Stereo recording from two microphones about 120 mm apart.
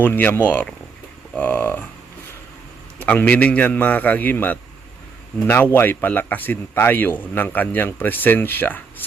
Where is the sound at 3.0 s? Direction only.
15° left (ahead or behind).